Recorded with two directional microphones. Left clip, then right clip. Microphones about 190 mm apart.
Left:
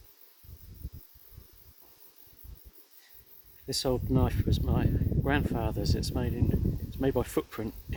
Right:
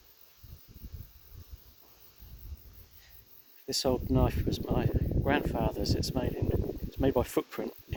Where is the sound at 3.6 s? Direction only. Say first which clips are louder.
Even; 20° right (ahead or behind).